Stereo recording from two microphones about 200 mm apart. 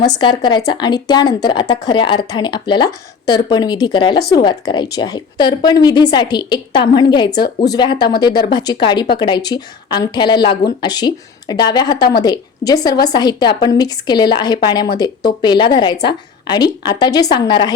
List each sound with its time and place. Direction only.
0.2 s speech: 25° left (ahead or behind)